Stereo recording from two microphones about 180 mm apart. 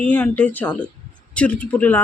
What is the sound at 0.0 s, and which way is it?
Speech, 10° left (ahead or behind).